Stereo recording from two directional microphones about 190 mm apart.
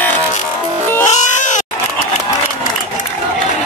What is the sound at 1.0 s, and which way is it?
Cat, 40° left (ahead or behind).